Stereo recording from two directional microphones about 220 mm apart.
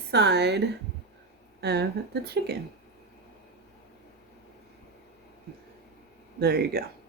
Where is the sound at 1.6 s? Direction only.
50° right (ahead or behind).